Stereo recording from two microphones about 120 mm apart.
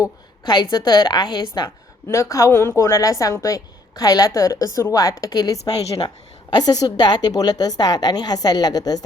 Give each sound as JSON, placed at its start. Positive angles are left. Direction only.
{"t": 0.5, "sound": "a woman's voice", "side_deg": 35}